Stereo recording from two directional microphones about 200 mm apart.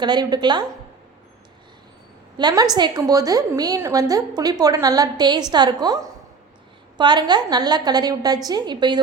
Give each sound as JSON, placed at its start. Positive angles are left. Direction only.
{"t": 0.0, "sound": "a woman's voice", "side_deg": -20}
{"t": 2.4, "sound": "a woman's voice", "side_deg": -20}